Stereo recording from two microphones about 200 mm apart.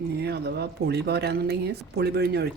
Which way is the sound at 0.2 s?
55° right (ahead or behind).